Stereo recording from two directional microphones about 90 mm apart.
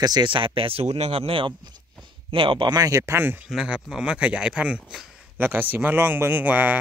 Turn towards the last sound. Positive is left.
turn(degrees=-20)  # may be behind; listen again after turning